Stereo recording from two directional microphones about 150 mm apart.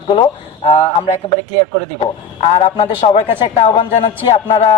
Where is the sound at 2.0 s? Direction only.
40° left (ahead or behind).